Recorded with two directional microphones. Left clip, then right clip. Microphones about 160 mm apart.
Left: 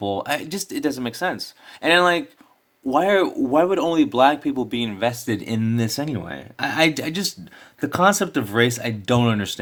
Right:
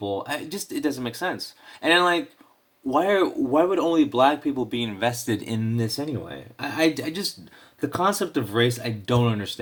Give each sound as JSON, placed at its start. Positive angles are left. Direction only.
{"t": 0.0, "sound": "speech", "side_deg": 40}
{"t": 4.9, "sound": "speech", "side_deg": 15}
{"t": 5.5, "sound": "speech", "side_deg": 40}